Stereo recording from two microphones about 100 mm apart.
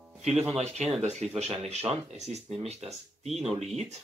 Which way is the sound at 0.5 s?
90° right.